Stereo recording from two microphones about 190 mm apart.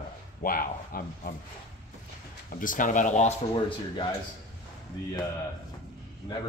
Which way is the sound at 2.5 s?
45° left (ahead or behind).